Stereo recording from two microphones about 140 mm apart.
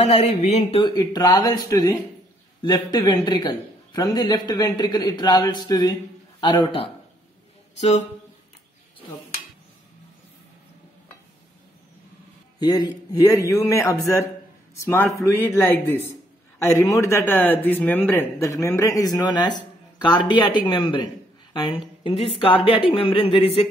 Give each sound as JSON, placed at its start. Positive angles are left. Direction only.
{"t": 0.0, "sound": "a sound", "side_deg": 55}
{"t": 0.8, "sound": "speech", "side_deg": 30}
{"t": 12.5, "sound": "a woman's voice", "side_deg": 25}